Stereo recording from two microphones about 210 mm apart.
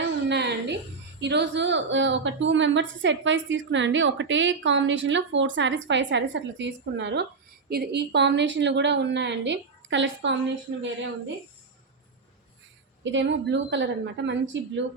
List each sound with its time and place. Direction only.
0.3 s a sound: 55° right (ahead or behind)
1.2 s a woman's voice: 55° right (ahead or behind)
13.1 s a woman's voice: 60° right (ahead or behind)